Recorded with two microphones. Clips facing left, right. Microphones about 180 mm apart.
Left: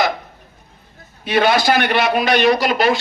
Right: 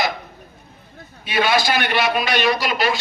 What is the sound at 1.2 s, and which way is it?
A man's voice, 55° left (ahead or behind).